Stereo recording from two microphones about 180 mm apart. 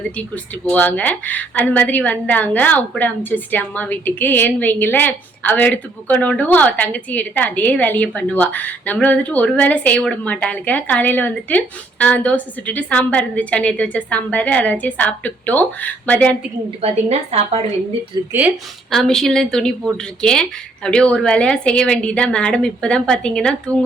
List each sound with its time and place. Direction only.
0.2 s a woman's voice: 5° left (ahead or behind)
16.8 s a woman's voice: 35° right (ahead or behind)
18.3 s speech: 10° right (ahead or behind)
18.9 s a woman's voice: centre (ahead or behind)